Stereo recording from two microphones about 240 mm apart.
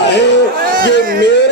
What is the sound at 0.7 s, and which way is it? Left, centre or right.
Speech, right.